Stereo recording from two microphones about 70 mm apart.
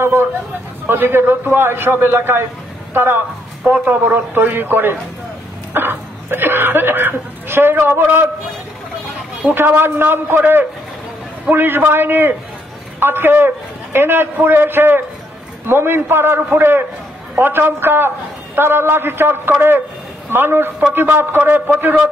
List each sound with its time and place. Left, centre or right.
0.0 s a man's voice: right
3.6 s speech: right
9.5 s a man's voice: right